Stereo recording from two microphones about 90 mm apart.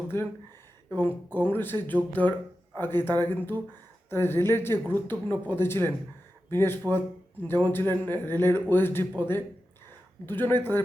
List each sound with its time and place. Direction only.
0.1 s a woman's voice: 25° left (ahead or behind)